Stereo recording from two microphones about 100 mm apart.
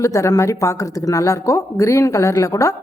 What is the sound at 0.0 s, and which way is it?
Speech, 30° left (ahead or behind).